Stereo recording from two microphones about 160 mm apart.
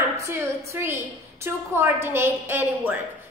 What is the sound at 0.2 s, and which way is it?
A woman's voice, 15° right (ahead or behind).